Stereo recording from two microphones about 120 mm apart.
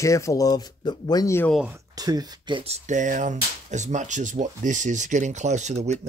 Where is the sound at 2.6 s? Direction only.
75° right (ahead or behind).